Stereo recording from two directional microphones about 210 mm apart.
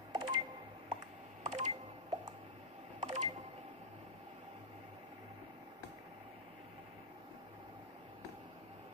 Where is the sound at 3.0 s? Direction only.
30° right (ahead or behind).